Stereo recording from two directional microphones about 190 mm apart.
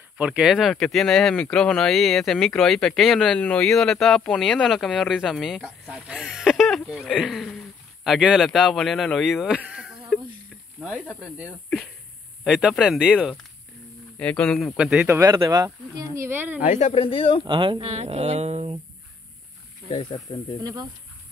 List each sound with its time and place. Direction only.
0.2 s speech: 5° right (ahead or behind)
16.6 s speech: 35° left (ahead or behind)
17.5 s speech: 25° right (ahead or behind)
19.9 s speech: 25° left (ahead or behind)